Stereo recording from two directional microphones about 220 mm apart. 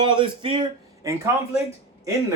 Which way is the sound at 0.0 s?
20° right (ahead or behind).